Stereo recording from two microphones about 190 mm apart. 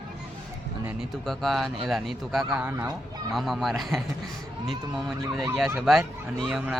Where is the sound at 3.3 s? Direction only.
Centre (ahead or behind).